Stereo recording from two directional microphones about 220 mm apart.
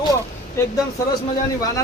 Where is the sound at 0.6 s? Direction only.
10° left (ahead or behind).